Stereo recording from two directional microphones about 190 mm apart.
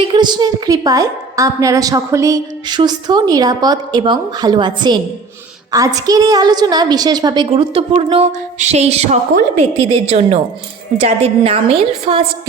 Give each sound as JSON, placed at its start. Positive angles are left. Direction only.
{"t": 0.0, "sound": "a woman's voice", "side_deg": -25}